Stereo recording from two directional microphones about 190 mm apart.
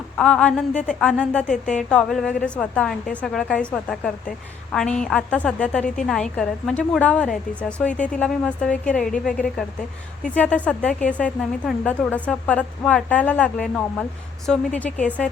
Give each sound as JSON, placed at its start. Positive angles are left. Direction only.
{"t": 0.2, "sound": "a woman's voice", "side_deg": 5}